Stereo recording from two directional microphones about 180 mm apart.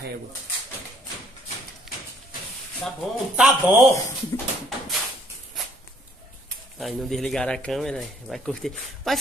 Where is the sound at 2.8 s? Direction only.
5° left (ahead or behind).